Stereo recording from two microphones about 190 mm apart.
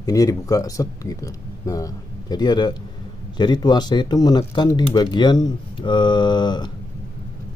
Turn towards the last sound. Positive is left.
turn(degrees=25)  # may be behind; listen again after turning